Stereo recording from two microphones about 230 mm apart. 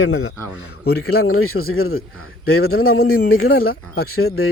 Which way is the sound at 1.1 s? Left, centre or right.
Left.